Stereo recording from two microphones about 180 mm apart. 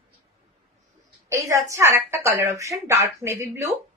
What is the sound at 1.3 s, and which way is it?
A woman's voice, 15° right (ahead or behind).